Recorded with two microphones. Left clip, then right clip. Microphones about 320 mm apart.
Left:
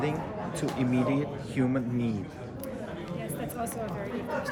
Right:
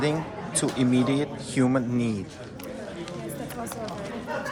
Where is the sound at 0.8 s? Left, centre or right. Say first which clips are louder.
Right 4 dB; centre.